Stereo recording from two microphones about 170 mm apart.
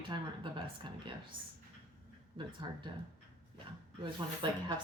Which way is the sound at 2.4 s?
30° right (ahead or behind).